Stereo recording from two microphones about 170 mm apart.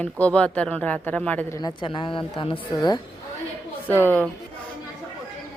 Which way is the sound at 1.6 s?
30° left (ahead or behind).